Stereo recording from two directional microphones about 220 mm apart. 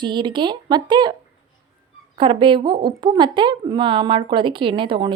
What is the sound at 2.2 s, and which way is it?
A woman's voice, 20° right (ahead or behind).